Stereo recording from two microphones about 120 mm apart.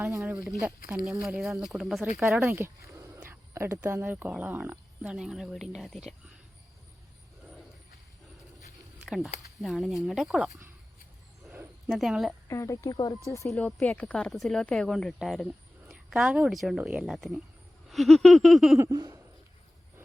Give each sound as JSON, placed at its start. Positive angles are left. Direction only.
{"t": 0.2, "sound": "speech", "side_deg": -5}
{"t": 2.4, "sound": "speech", "side_deg": -20}
{"t": 3.2, "sound": "a sound", "side_deg": -20}
{"t": 3.8, "sound": "speech", "side_deg": -15}
{"t": 9.0, "sound": "speech", "side_deg": 0}
{"t": 11.9, "sound": "speech", "side_deg": 0}
{"t": 12.5, "sound": "a woman's voice", "side_deg": 25}
{"t": 13.5, "sound": "speech", "side_deg": 5}
{"t": 18.8, "sound": "speech", "side_deg": -25}